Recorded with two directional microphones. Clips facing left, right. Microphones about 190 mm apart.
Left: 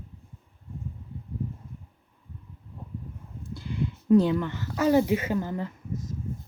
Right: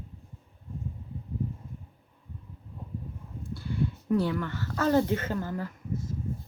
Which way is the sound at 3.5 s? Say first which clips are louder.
Right 1 dB; 20° left (ahead or behind).